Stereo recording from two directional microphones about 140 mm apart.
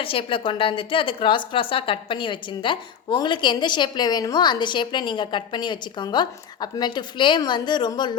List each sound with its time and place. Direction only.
0.0 s a woman's voice: 40° left (ahead or behind)